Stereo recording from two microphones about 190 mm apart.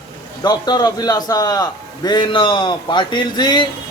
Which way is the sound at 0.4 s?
20° left (ahead or behind).